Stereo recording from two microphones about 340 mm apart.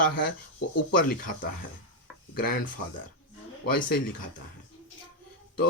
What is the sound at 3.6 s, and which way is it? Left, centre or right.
Speech, left.